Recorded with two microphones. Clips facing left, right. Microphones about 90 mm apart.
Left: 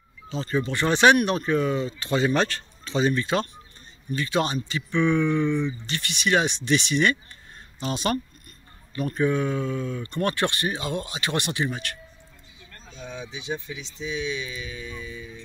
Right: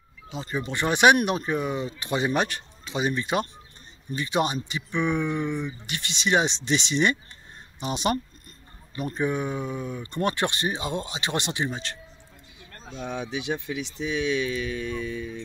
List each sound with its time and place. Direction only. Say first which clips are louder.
0.3 s speech: left 4 dB; 15° right (ahead or behind)
12.8 s speech: right 5 dB; 65° right (ahead or behind)